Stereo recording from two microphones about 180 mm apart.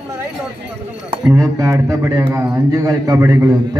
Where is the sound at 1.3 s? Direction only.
20° right (ahead or behind).